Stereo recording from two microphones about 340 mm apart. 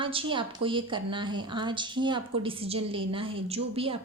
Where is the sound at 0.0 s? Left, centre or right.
Centre.